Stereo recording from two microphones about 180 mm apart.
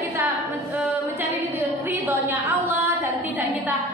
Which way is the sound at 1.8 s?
10° right (ahead or behind).